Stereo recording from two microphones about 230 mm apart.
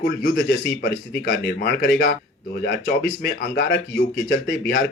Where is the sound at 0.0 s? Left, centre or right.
Left.